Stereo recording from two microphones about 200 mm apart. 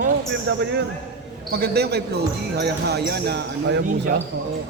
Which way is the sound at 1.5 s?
55° right (ahead or behind).